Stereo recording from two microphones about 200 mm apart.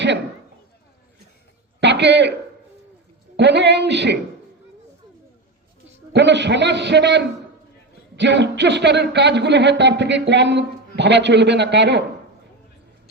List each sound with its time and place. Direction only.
1.8 s speech: 60° right (ahead or behind)
3.3 s speech: 60° right (ahead or behind)
6.1 s speech: 60° right (ahead or behind)